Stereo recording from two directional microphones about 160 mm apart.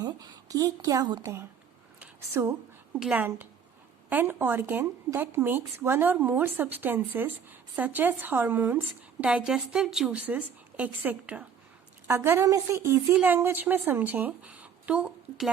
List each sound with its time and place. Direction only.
0.0 s a woman's voice: 25° right (ahead or behind)
2.0 s a sound: 15° right (ahead or behind)
3.0 s a woman's voice: 10° right (ahead or behind)